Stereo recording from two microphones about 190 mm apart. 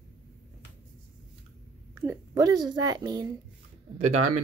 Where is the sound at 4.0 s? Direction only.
40° right (ahead or behind).